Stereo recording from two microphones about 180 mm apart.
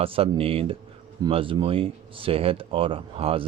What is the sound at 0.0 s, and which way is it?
Speech, 30° right (ahead or behind).